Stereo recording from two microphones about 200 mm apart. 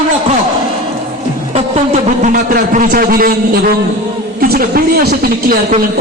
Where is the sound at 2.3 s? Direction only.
45° right (ahead or behind).